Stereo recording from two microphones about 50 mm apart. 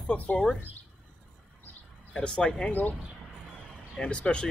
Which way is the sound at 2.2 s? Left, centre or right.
Centre.